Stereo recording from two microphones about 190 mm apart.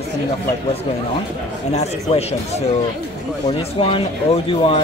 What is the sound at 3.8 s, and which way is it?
Speech, 30° left (ahead or behind).